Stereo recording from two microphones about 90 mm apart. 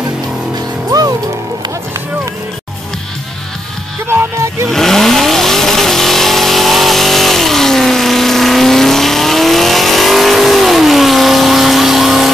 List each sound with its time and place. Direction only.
0.8 s music: 45° right (ahead or behind)
4.1 s music: 30° right (ahead or behind)
4.6 s vehicle: 5° left (ahead or behind)